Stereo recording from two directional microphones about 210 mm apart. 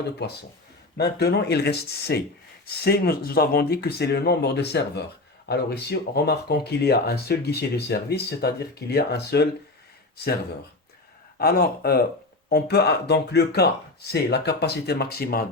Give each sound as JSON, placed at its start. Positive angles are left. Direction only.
{"t": 0.2, "sound": "speech", "side_deg": 50}
{"t": 11.3, "sound": "speech", "side_deg": 50}